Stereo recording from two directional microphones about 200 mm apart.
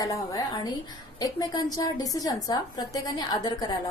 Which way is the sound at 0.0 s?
15° left (ahead or behind).